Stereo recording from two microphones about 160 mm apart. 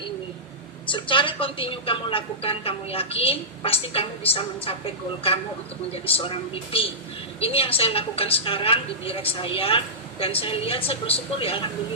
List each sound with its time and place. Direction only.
0.9 s a woman's voice: 30° left (ahead or behind)
5.9 s a woman's voice: 35° left (ahead or behind)